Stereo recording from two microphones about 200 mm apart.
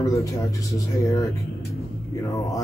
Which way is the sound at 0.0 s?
15° left (ahead or behind).